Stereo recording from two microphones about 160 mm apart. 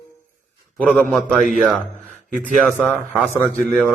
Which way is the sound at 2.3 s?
55° right (ahead or behind).